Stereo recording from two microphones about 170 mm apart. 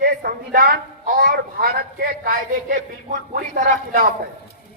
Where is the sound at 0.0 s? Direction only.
65° right (ahead or behind).